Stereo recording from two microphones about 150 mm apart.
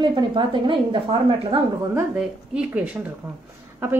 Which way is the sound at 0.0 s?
30° right (ahead or behind).